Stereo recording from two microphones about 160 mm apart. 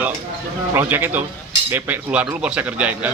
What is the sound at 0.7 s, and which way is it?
Speech, 15° right (ahead or behind).